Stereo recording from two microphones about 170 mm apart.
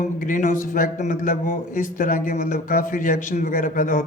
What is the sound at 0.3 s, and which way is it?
A man's voice, 50° left (ahead or behind).